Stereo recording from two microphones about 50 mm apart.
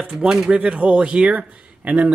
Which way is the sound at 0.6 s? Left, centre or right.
Right.